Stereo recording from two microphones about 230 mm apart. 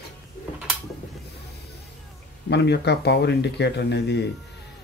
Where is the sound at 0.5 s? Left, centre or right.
Centre.